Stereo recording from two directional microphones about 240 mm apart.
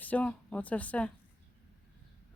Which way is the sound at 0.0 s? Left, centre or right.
Centre.